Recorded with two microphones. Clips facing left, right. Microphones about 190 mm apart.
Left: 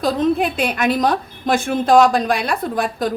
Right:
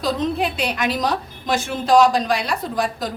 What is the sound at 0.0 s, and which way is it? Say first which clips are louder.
A woman's voice: left 4 dB; 50° left (ahead or behind).